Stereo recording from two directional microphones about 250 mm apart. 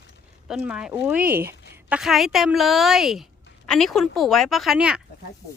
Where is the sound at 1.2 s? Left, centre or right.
Right.